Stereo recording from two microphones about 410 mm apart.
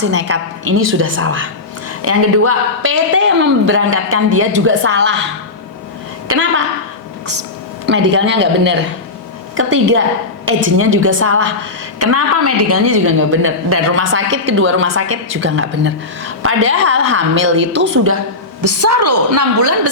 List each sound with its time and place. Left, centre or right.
0.0 s a woman's voice: right
7.9 s a woman's voice: right